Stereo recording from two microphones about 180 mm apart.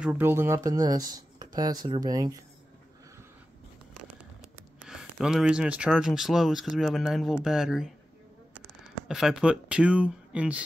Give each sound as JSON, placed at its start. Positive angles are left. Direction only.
{"t": 0.0, "sound": "speech", "side_deg": -10}
{"t": 4.8, "sound": "speech", "side_deg": -5}
{"t": 9.0, "sound": "speech", "side_deg": 0}